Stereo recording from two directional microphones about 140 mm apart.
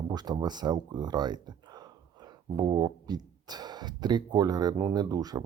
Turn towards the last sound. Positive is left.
turn(degrees=-25)  # may be behind; listen again after turning